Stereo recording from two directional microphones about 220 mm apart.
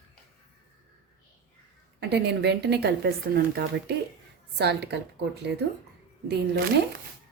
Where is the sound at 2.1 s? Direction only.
50° right (ahead or behind).